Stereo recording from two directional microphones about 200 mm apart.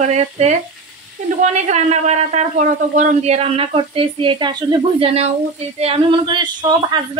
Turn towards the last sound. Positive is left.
turn(degrees=-20)  # may be behind; listen again after turning